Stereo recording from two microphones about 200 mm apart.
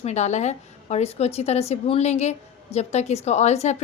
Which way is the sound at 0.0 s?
35° left (ahead or behind).